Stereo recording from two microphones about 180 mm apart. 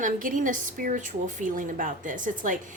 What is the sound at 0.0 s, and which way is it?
A woman's voice, 50° right (ahead or behind).